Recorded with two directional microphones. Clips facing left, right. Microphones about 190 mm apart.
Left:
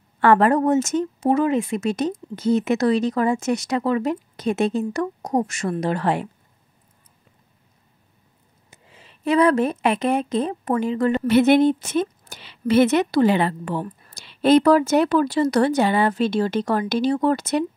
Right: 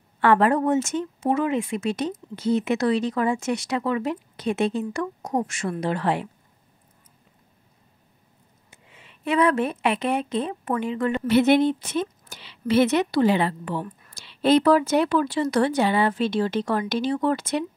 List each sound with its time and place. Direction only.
0.2 s a woman's voice: 45° left (ahead or behind)
8.6 s a woman's voice: 35° left (ahead or behind)